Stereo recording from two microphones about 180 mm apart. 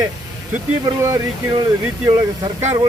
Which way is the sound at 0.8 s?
20° right (ahead or behind).